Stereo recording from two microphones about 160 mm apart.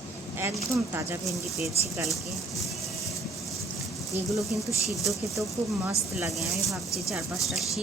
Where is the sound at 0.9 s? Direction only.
15° right (ahead or behind).